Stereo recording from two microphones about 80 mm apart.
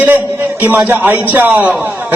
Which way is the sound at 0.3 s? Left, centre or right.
Right.